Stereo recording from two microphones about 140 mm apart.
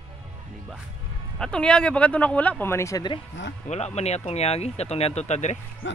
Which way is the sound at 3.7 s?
50° left (ahead or behind).